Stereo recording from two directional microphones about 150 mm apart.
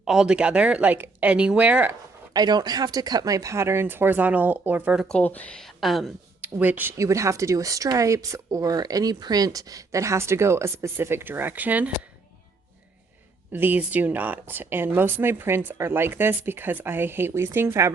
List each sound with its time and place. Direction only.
0.0 s speech: 5° right (ahead or behind)
2.3 s speech: 25° right (ahead or behind); by 5.0 s 10° right (ahead or behind)
5.0 s speech: 10° left (ahead or behind)
6.4 s speech: 10° right (ahead or behind)
13.5 s speech: 10° right (ahead or behind)